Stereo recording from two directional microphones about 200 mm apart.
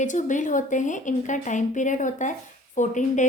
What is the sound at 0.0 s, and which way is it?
A woman's voice, 40° left (ahead or behind).